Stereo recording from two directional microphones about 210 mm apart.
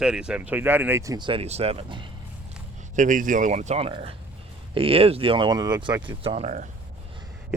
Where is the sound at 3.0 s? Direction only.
40° right (ahead or behind).